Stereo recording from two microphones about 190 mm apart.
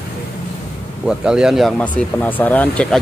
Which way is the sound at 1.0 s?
5° right (ahead or behind).